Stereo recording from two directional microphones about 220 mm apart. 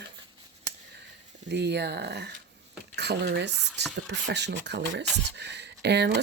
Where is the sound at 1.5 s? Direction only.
50° right (ahead or behind).